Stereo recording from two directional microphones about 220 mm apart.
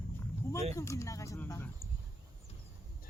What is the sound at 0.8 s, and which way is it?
Speech, 15° left (ahead or behind).